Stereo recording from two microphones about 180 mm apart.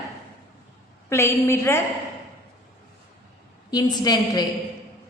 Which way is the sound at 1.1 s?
15° left (ahead or behind).